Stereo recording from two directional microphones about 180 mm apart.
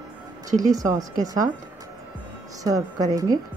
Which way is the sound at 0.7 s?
20° right (ahead or behind).